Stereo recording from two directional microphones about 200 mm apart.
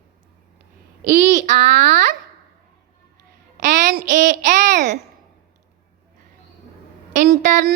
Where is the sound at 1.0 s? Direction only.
40° right (ahead or behind).